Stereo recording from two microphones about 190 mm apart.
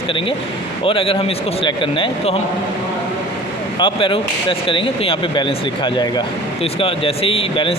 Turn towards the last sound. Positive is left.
turn(degrees=30)  # may be behind; listen again after turning